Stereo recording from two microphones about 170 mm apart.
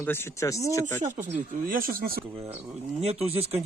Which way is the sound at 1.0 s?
45° right (ahead or behind).